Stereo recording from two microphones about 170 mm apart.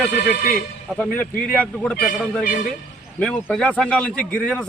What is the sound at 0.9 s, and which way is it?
A man's voice, 5° left (ahead or behind).